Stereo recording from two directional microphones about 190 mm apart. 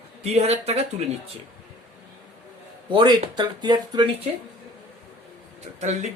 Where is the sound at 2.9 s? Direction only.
25° right (ahead or behind).